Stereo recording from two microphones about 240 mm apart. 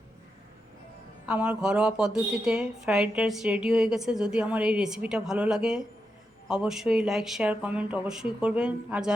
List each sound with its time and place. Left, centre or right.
1.3 s speech: centre